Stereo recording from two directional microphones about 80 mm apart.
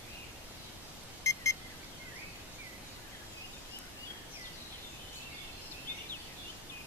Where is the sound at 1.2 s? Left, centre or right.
Left.